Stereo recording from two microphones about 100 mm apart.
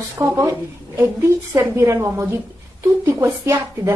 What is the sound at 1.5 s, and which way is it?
Speech, 30° right (ahead or behind).